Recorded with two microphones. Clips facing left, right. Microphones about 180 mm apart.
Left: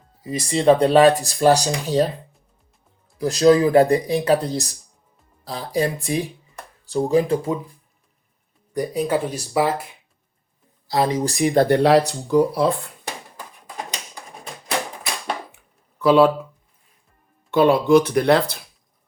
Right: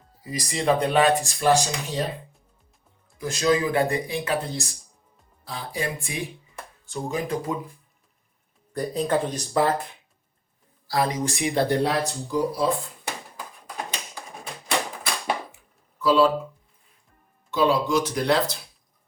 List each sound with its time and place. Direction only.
0.2 s speech: 25° left (ahead or behind)
3.2 s speech: 35° left (ahead or behind)
8.7 s speech: 10° left (ahead or behind)
10.8 s speech: 25° left (ahead or behind)
11.7 s speech: 80° left; by 12.9 s 65° left (ahead or behind)
16.0 s speech: 60° left (ahead or behind)
17.5 s speech: 60° left (ahead or behind)